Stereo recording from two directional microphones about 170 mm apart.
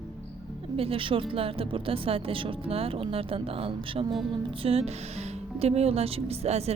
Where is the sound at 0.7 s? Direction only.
35° right (ahead or behind).